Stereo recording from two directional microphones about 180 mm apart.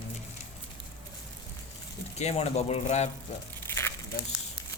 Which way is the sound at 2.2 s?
35° left (ahead or behind).